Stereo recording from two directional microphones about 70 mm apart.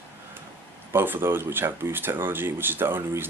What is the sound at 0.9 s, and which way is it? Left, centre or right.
Speech, right.